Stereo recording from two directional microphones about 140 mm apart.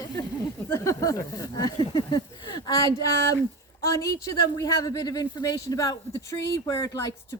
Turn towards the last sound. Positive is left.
turn(degrees=25)  # may be behind; listen again after turning